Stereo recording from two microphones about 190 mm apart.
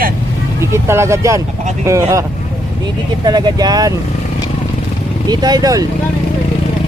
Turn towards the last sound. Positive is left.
turn(degrees=-20)  # may be behind; listen again after turning